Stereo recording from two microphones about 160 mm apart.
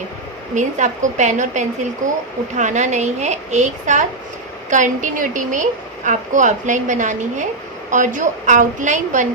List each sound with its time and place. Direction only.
0.5 s a woman's voice: 50° right (ahead or behind)